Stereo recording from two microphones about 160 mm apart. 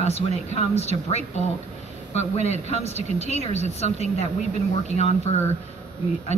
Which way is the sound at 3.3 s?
45° right (ahead or behind).